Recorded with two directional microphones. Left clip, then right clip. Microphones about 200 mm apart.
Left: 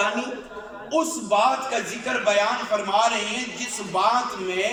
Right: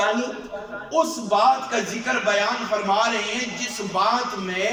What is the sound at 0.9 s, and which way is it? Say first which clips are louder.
A man's voice: right 1 dB; 15° left (ahead or behind).